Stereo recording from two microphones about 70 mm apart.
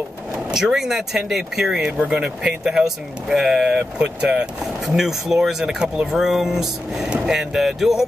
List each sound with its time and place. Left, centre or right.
0.5 s speech: centre
4.8 s speech: centre